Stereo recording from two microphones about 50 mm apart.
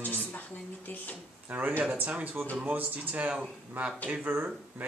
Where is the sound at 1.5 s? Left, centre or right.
Right.